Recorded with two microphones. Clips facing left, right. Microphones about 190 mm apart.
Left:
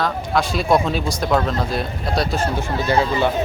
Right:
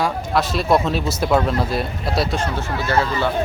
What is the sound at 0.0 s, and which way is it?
Speech, centre (ahead or behind).